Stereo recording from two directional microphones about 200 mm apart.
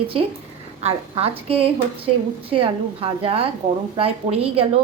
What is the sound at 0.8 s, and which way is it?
A woman's voice, 30° right (ahead or behind).